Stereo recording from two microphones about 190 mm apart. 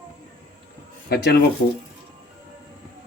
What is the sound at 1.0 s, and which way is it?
Speech, 60° left (ahead or behind).